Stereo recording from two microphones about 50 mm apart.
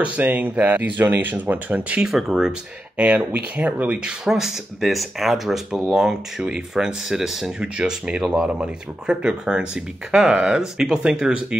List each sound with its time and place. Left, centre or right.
0.2 s speech: right
2.0 s speech: centre
3.0 s speech: right
4.3 s speech: centre
7.6 s speech: centre
8.2 s speech: centre
8.5 s speech: centre